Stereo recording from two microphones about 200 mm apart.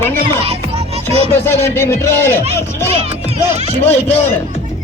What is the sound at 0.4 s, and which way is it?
Music, 30° right (ahead or behind).